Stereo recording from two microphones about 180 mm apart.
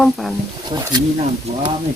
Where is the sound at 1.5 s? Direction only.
35° right (ahead or behind).